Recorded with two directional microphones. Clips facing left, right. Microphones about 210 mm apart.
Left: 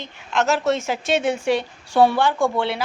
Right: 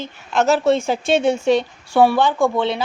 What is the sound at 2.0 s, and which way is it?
Speech, 15° right (ahead or behind).